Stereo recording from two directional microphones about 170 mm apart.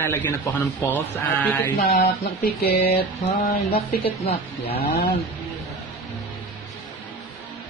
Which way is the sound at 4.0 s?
35° left (ahead or behind).